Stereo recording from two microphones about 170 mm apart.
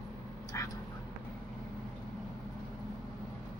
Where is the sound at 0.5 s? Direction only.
15° left (ahead or behind).